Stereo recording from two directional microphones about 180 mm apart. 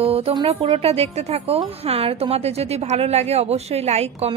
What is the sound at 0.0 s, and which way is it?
Music, 35° right (ahead or behind).